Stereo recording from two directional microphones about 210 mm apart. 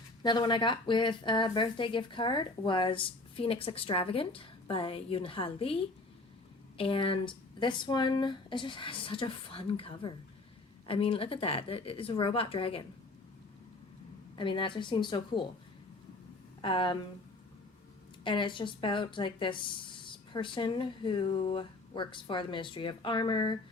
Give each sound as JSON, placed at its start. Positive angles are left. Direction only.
{"t": 0.2, "sound": "speech", "side_deg": 20}
{"t": 14.3, "sound": "speech", "side_deg": 25}
{"t": 16.6, "sound": "speech", "side_deg": 25}
{"t": 18.2, "sound": "speech", "side_deg": 25}